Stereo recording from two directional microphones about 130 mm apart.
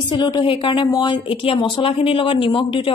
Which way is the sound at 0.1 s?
35° left (ahead or behind).